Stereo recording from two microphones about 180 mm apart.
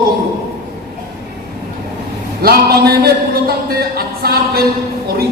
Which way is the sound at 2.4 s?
60° right (ahead or behind).